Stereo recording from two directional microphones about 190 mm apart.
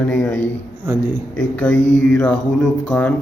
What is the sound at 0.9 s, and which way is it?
Speech, 10° right (ahead or behind).